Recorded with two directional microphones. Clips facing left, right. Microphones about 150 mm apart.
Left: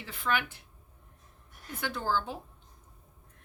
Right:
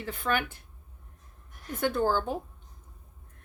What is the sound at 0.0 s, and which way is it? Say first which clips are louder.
Speech: right 2 dB; 50° right (ahead or behind).